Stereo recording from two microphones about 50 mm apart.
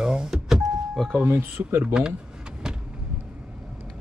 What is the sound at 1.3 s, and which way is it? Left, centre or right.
Speech, right.